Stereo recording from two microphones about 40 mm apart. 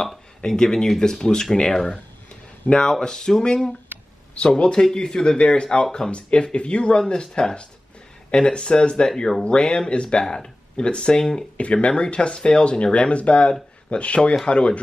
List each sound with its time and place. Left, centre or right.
0.5 s speech: centre
4.6 s speech: left
9.1 s speech: centre
9.4 s speech: left
11.5 s speech: left